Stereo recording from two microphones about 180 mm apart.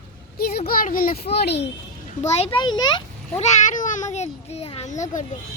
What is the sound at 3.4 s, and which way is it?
A child's voice, 40° left (ahead or behind).